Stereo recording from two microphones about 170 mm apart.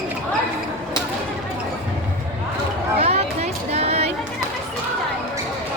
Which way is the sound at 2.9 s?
40° right (ahead or behind).